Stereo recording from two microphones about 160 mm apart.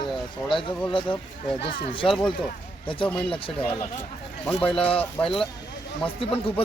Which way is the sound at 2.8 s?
30° left (ahead or behind).